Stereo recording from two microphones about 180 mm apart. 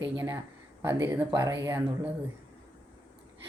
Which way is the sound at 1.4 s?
20° right (ahead or behind).